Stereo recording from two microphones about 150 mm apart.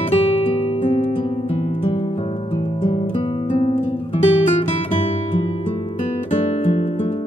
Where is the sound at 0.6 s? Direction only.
50° left (ahead or behind).